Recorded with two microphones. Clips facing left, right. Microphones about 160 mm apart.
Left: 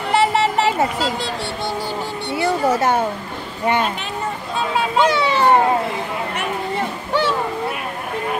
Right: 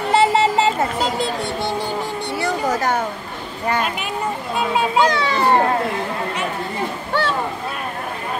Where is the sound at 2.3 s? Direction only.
25° left (ahead or behind).